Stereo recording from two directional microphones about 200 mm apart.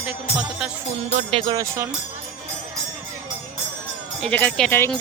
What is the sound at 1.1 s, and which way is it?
Speech, 30° right (ahead or behind).